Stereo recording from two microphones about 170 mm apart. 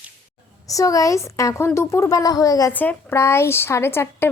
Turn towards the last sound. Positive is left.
turn(degrees=15)  # may be behind; listen again after turning